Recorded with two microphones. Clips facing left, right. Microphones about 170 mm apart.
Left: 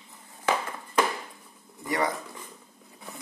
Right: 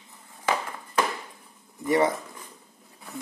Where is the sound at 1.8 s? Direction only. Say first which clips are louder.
Right 6 dB; 20° right (ahead or behind).